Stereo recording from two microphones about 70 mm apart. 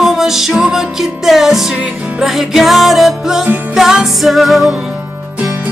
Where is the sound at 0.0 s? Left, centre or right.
Centre.